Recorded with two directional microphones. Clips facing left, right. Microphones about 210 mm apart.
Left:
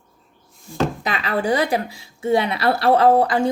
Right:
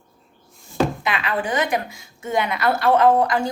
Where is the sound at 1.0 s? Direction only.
35° left (ahead or behind).